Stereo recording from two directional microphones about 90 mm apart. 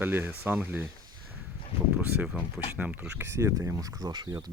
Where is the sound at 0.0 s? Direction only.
20° right (ahead or behind).